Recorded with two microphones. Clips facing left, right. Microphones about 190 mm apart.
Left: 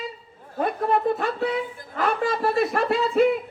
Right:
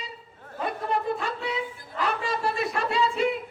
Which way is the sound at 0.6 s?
50° left (ahead or behind).